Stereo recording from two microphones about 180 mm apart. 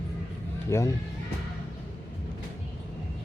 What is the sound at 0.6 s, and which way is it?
Speech, 15° left (ahead or behind).